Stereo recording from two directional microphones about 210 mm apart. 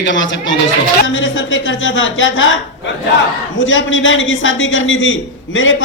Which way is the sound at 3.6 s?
65° left (ahead or behind).